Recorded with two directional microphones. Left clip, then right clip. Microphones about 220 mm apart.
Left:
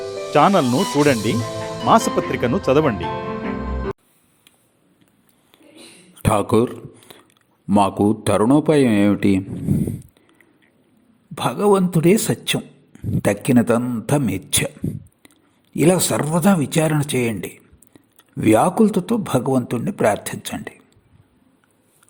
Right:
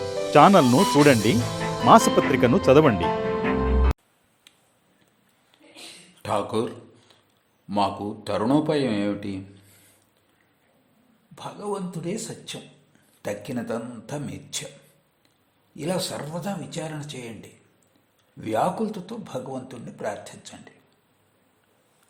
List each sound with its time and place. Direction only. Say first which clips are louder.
0.0 s speech: even; centre (ahead or behind)
6.2 s a sound: left 8 dB; 30° left (ahead or behind)
7.7 s a man's voice: left 8 dB; 35° left (ahead or behind)
11.3 s a man's voice: left 15 dB; 40° left (ahead or behind)
15.7 s a man's voice: left 11 dB; 35° left (ahead or behind)